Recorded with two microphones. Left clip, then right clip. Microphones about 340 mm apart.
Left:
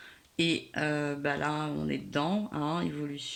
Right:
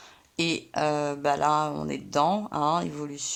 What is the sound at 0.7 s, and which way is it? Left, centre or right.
Speech, centre.